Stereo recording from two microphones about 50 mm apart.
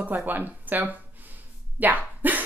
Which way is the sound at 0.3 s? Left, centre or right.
Right.